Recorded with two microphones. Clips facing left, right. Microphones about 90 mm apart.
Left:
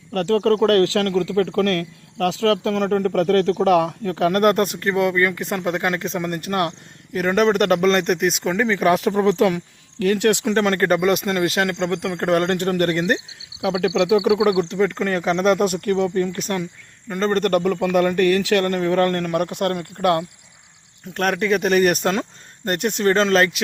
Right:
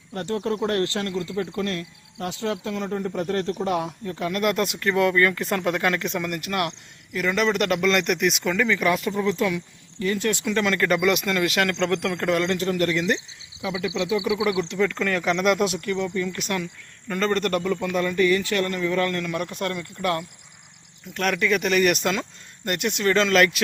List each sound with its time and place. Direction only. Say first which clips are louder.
0.1 s speech: left 8 dB; 80° left; by 4.9 s 45° left (ahead or behind)
4.9 s speech: right 1 dB; 25° left (ahead or behind)
7.1 s speech: left 5 dB; 45° left (ahead or behind)
9.1 s speech: left 6 dB; 60° left (ahead or behind)
10.4 s speech: left 4 dB; 40° left (ahead or behind)
12.2 s speech: left 7 dB; 45° left (ahead or behind)
14.6 s speech: left 3 dB; 35° left (ahead or behind)
17.1 s speech: left 2 dB; 30° left (ahead or behind)
17.3 s speech: left 5 dB; 50° left (ahead or behind)
21.1 s speech: left 3 dB; 40° left (ahead or behind)